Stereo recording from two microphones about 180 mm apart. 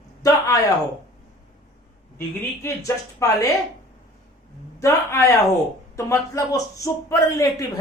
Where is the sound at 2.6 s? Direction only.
15° left (ahead or behind).